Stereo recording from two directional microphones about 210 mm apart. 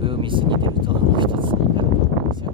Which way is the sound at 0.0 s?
25° right (ahead or behind).